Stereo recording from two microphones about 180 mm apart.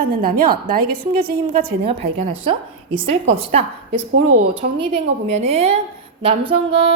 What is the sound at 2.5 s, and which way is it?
Speech, 30° right (ahead or behind).